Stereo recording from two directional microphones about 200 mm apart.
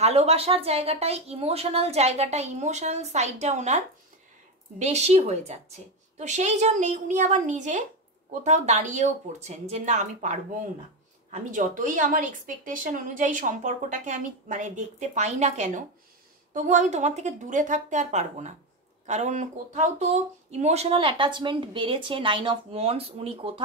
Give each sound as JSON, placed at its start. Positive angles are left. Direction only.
{"t": 0.0, "sound": "a woman's voice", "side_deg": -30}
{"t": 11.5, "sound": "a woman's voice", "side_deg": -40}